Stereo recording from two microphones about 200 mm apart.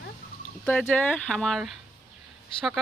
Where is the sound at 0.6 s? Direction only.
5° left (ahead or behind).